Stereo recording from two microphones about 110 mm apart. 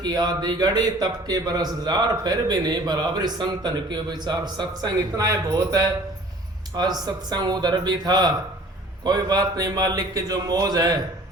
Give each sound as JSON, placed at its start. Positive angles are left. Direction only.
{"t": 0.0, "sound": "a man's voice", "side_deg": -40}